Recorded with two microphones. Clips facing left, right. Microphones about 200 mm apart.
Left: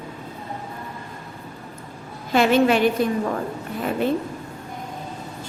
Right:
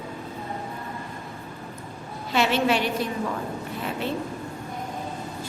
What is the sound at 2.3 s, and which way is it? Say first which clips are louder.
Speech: left 5 dB; 50° left (ahead or behind).